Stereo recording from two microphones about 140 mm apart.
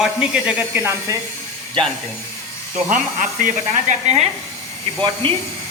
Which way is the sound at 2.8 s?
65° right (ahead or behind).